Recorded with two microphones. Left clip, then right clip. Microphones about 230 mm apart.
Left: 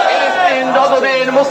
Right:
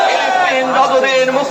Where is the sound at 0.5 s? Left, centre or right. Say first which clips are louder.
Even; right.